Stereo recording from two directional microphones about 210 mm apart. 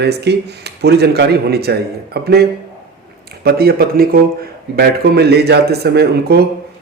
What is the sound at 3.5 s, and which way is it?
A man's voice, 45° right (ahead or behind).